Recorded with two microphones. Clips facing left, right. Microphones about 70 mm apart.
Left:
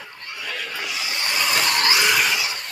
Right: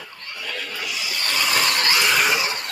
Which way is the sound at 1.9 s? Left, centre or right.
Centre.